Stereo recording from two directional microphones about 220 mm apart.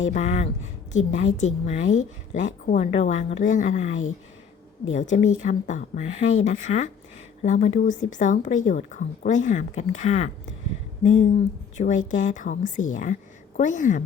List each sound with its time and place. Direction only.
0.1 s a woman's voice: 30° left (ahead or behind)
4.9 s a woman's voice: 30° left (ahead or behind)
11.8 s a woman's voice: 35° left (ahead or behind)